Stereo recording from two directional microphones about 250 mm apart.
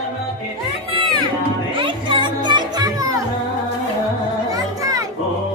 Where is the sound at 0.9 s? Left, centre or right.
Right.